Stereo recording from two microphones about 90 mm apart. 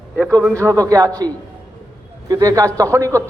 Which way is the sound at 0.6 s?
35° right (ahead or behind).